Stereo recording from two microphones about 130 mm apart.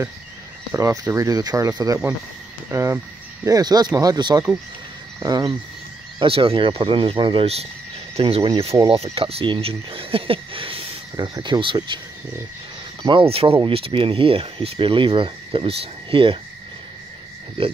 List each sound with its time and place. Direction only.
1.1 s speech: 25° right (ahead or behind)
6.1 s speech: 45° right (ahead or behind)
11.1 s speech: 30° right (ahead or behind)
13.0 s speech: 45° right (ahead or behind)